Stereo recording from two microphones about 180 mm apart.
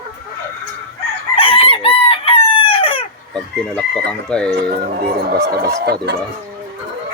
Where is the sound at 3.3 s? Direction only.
5° left (ahead or behind).